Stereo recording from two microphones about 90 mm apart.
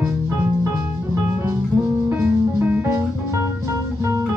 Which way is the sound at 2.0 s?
25° right (ahead or behind).